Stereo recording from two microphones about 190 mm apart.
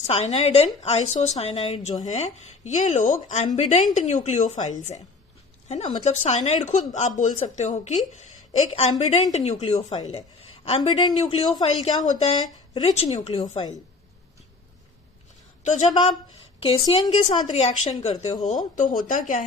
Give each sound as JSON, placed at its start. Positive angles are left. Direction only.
{"t": 0.1, "sound": "a woman's voice", "side_deg": 35}
{"t": 15.6, "sound": "a woman's voice", "side_deg": 40}